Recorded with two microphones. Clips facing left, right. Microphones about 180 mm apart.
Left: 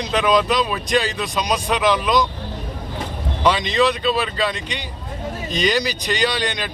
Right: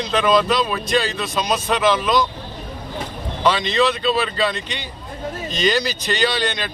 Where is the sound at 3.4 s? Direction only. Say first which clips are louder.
Even; 15° left (ahead or behind).